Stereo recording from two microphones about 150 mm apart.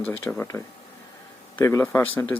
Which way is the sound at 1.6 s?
15° left (ahead or behind).